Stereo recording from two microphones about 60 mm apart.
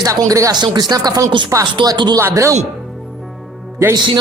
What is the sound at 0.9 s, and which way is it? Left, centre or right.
Speech, right.